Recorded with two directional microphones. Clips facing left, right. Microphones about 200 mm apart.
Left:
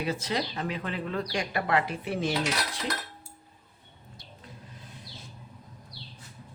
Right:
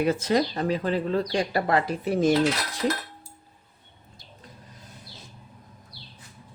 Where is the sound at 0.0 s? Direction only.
50° right (ahead or behind).